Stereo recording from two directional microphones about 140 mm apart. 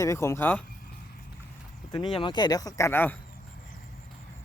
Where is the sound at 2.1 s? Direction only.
35° left (ahead or behind); by 3.1 s 15° left (ahead or behind).